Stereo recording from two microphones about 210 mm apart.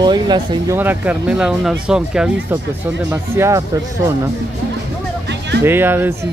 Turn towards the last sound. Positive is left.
turn(degrees=-10)  # may be behind; listen again after turning